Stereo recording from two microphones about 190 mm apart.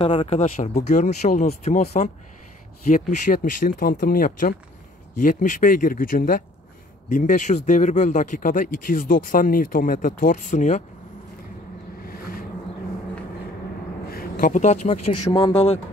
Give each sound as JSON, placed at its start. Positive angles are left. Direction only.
{"t": 0.0, "sound": "speech", "side_deg": 30}
{"t": 0.9, "sound": "speech", "side_deg": 40}
{"t": 12.1, "sound": "vehicle", "side_deg": 50}
{"t": 14.1, "sound": "speech", "side_deg": 45}
{"t": 15.3, "sound": "speech", "side_deg": 30}